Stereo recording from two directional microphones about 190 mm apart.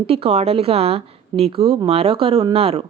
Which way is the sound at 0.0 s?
30° right (ahead or behind).